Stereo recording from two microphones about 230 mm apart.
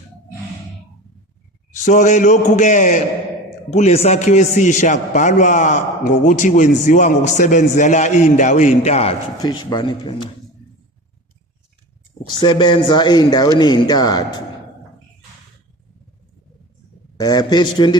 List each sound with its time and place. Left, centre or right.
1.8 s a man's voice: left
12.3 s a man's voice: centre
17.2 s a man's voice: centre